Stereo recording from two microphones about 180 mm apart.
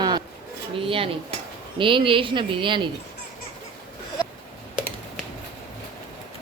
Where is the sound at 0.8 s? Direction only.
30° right (ahead or behind).